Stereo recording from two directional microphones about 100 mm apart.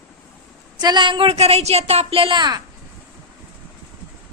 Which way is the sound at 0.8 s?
45° right (ahead or behind).